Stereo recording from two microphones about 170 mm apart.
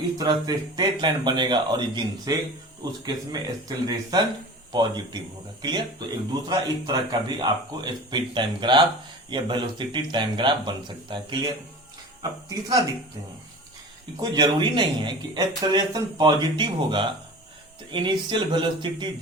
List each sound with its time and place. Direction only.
0.2 s speech: 25° right (ahead or behind)
12.5 s speech: 20° right (ahead or behind)
14.2 s speech: 25° right (ahead or behind)